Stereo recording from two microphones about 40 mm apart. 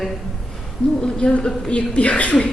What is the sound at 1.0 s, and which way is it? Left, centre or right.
A woman's voice, left.